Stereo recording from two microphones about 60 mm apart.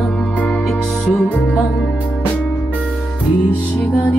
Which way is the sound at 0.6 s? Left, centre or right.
Centre.